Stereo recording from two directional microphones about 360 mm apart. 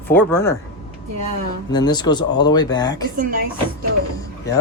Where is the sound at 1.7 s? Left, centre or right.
Centre.